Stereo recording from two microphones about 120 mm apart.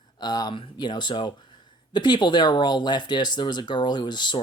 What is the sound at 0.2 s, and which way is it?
Speech, 35° left (ahead or behind).